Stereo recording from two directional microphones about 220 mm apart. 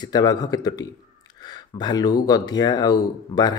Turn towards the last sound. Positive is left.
turn(degrees=15)  # may be behind; listen again after turning